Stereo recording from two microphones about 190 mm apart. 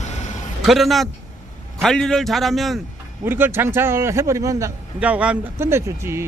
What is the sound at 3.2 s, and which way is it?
A man's voice, 10° right (ahead or behind).